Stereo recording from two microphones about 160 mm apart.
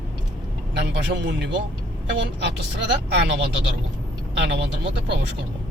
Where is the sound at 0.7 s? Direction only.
90° right.